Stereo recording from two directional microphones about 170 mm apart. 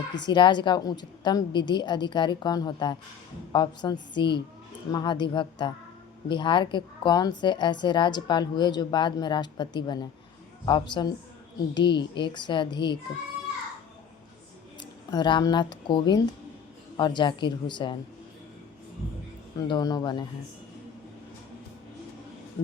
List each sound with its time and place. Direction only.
0.1 s a woman's voice: 25° left (ahead or behind)
14.8 s a woman's voice: 25° left (ahead or behind)
19.5 s a woman's voice: 25° left (ahead or behind)